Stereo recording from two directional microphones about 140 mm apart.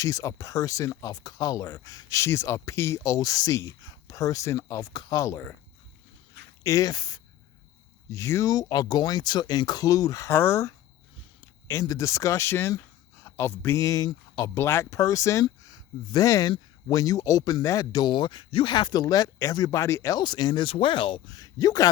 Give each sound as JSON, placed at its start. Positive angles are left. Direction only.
{"t": 0.0, "sound": "speech", "side_deg": 25}
{"t": 6.6, "sound": "speech", "side_deg": 20}